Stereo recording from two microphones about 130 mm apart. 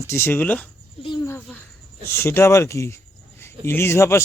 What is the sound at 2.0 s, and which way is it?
A man's voice, 20° left (ahead or behind).